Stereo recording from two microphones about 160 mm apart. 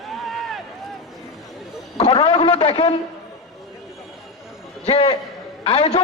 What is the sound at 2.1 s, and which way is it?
Speech, 35° left (ahead or behind).